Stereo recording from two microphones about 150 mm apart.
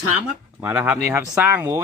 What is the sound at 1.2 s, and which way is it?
Speech, 20° right (ahead or behind).